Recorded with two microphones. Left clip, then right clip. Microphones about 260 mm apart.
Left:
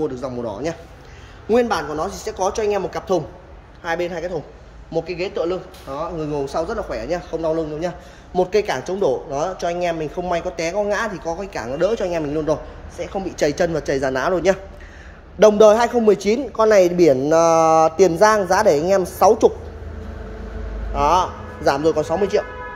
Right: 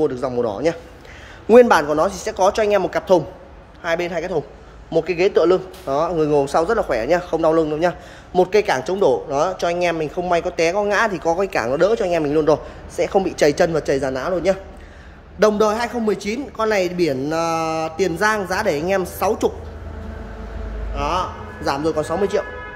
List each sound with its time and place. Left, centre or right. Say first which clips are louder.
0.0 s speech: right 5 dB; centre
12.9 s speech: right 9 dB; centre
13.2 s a man's voice: right 1 dB; centre
20.9 s speech: left 5 dB; centre